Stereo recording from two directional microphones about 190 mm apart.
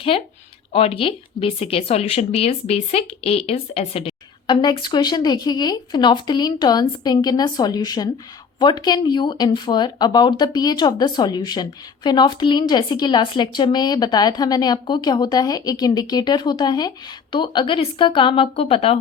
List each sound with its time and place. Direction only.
0.1 s speech: 30° left (ahead or behind)